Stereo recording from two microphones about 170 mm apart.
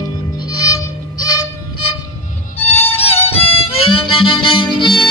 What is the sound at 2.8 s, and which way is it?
Music, 35° left (ahead or behind).